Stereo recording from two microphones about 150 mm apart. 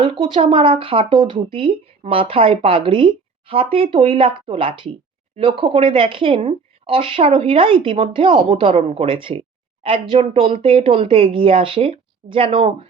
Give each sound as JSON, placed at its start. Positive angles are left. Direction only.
{"t": 0.0, "sound": "speech", "side_deg": -35}